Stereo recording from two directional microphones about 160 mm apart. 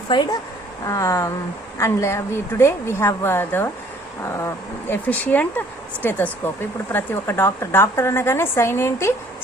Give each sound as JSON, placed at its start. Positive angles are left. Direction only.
{"t": 0.1, "sound": "speech", "side_deg": 25}